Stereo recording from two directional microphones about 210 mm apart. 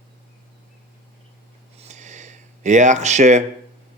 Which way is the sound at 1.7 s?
30° right (ahead or behind).